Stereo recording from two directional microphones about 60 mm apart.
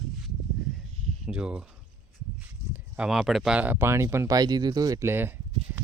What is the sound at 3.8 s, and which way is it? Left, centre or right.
Speech, right.